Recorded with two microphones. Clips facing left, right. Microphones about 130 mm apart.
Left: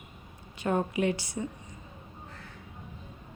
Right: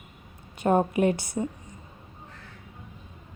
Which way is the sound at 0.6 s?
45° right (ahead or behind).